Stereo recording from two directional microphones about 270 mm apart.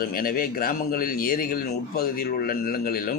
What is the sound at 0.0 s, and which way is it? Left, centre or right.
A man's voice, left.